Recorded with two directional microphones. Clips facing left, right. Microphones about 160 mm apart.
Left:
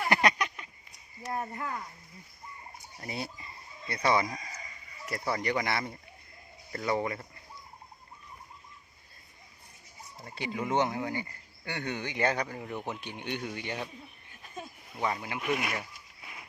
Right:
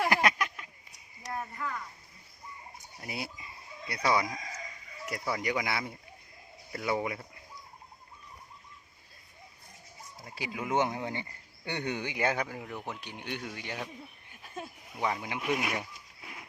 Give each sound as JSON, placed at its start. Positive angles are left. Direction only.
{"t": 0.1, "sound": "a sound", "side_deg": -5}
{"t": 1.3, "sound": "cricket", "side_deg": 30}
{"t": 3.0, "sound": "speech", "side_deg": -5}
{"t": 10.2, "sound": "speech", "side_deg": -5}
{"t": 10.8, "sound": "speech", "side_deg": -20}